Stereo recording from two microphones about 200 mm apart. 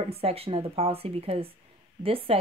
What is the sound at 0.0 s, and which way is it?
Speech, 30° right (ahead or behind).